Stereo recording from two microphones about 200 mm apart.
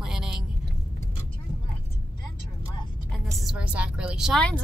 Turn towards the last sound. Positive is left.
turn(degrees=5)  # may be behind; listen again after turning